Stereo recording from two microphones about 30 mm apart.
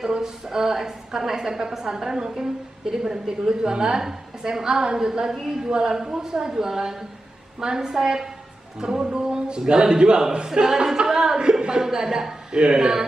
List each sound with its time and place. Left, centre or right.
0.0 s a woman's voice: centre
5.7 s a woman's voice: right
8.9 s music: right
9.7 s a man's voice: right
12.5 s a man's voice: right